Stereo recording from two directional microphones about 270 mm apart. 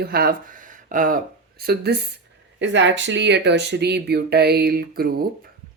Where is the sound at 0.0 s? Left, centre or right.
Right.